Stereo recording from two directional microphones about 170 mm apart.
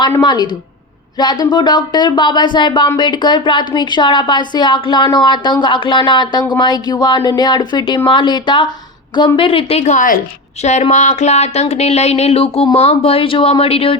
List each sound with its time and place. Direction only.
0.0 s speech: 25° left (ahead or behind)